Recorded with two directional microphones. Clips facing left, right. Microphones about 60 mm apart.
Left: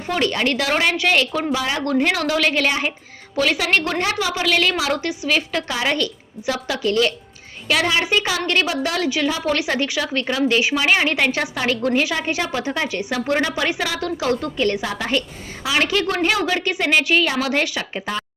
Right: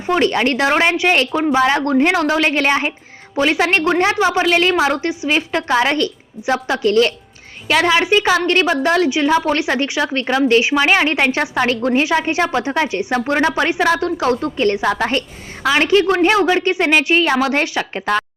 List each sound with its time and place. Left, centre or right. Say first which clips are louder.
0.1 s a woman's voice: right 5 dB; right
9.0 s a woman's voice: right 5 dB; right
15.7 s a woman's voice: right 6 dB; right
18.0 s speech: right 8 dB; right